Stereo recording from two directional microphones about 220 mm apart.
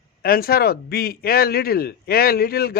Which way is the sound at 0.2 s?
45° left (ahead or behind).